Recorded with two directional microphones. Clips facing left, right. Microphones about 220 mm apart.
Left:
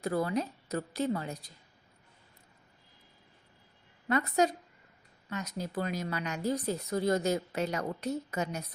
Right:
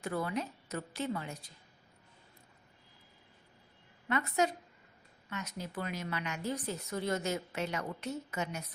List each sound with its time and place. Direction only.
0.0 s a woman's voice: 40° left (ahead or behind)
4.1 s a woman's voice: 40° left (ahead or behind)